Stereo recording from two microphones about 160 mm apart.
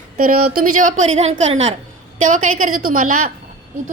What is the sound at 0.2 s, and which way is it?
A woman's voice, 60° right (ahead or behind).